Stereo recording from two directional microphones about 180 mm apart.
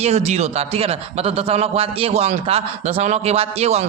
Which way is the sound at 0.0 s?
35° right (ahead or behind).